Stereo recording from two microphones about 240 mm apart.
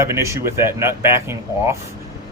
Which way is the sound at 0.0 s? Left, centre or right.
Centre.